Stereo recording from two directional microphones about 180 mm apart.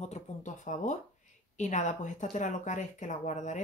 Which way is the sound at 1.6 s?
40° left (ahead or behind).